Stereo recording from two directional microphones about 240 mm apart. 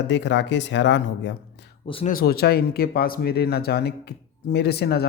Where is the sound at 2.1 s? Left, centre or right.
Left.